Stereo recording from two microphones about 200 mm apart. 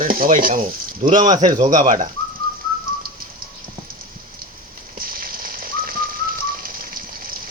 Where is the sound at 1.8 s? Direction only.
40° right (ahead or behind).